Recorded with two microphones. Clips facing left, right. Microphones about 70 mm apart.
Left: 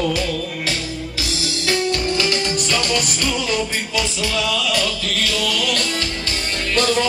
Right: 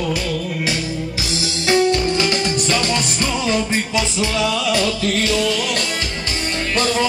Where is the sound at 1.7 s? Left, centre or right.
Right.